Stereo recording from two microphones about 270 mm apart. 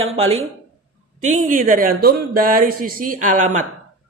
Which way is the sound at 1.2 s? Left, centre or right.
Right.